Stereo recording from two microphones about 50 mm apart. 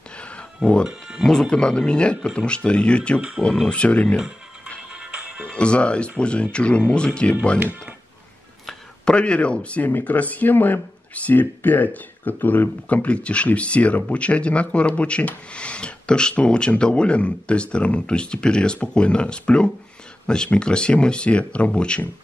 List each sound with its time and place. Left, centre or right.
0.1 s a sound: left
0.8 s music: centre
1.2 s speech: centre
3.2 s speech: centre
3.6 s speech: left
5.1 s music: centre
5.6 s speech: left
7.5 s speech: right
9.0 s speech: left
9.8 s speech: left